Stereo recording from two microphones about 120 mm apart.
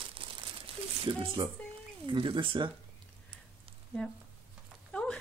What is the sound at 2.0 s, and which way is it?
Speech, 45° right (ahead or behind).